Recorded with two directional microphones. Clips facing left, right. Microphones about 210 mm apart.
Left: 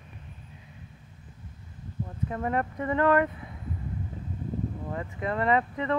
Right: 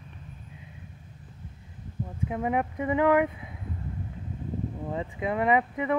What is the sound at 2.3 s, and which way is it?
Speech, 10° right (ahead or behind).